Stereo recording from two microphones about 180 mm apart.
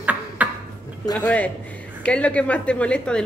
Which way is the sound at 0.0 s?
10° right (ahead or behind).